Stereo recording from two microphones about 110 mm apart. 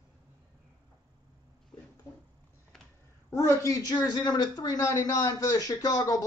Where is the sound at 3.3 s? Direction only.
30° left (ahead or behind).